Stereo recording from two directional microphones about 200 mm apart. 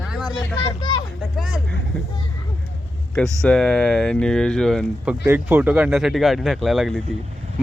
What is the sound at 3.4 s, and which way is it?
Speech, 5° left (ahead or behind).